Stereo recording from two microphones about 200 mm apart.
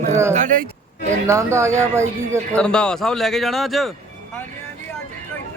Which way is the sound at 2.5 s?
5° left (ahead or behind).